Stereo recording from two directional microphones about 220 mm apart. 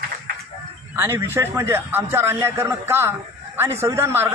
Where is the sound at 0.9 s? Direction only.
10° right (ahead or behind).